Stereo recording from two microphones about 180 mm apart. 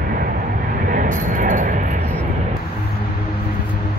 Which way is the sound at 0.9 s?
45° right (ahead or behind).